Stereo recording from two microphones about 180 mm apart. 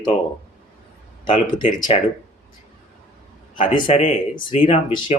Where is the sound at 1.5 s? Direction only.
25° left (ahead or behind).